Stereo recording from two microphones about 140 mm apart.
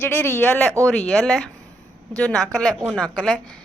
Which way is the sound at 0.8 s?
Centre (ahead or behind).